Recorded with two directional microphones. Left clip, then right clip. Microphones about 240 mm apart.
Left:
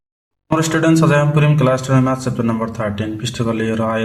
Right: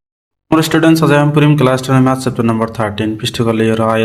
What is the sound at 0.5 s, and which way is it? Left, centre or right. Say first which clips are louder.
A man's voice: right 4 dB; right.